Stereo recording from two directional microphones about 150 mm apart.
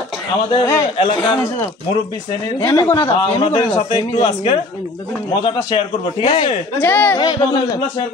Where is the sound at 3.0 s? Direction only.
40° left (ahead or behind).